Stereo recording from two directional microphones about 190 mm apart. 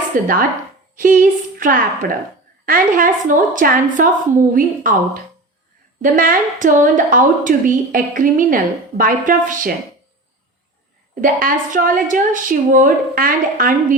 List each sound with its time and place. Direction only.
0.1 s a woman's voice: 45° right (ahead or behind)
11.1 s a woman's voice: 45° right (ahead or behind)